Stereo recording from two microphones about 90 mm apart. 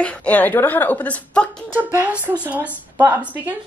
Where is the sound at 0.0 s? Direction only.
15° left (ahead or behind).